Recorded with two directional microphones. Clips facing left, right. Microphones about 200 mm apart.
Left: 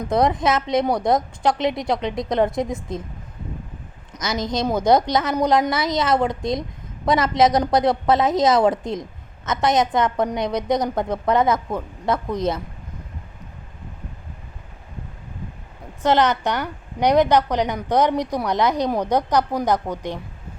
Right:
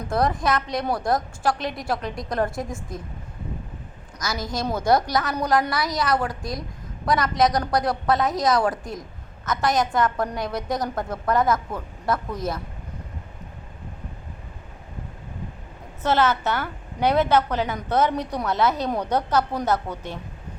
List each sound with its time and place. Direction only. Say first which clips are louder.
0.0 s a woman's voice: left 4 dB; 20° left (ahead or behind)
4.2 s a woman's voice: left 5 dB; 20° left (ahead or behind)
16.0 s a woman's voice: left 3 dB; 15° left (ahead or behind)